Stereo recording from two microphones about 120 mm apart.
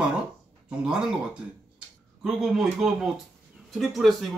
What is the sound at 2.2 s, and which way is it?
Speech, 5° right (ahead or behind).